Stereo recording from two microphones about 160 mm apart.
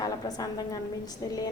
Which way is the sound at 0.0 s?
25° left (ahead or behind).